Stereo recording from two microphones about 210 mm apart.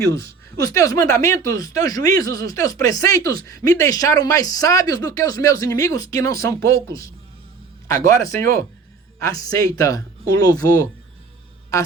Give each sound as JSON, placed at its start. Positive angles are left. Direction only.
{"t": 0.0, "sound": "speech", "side_deg": 15}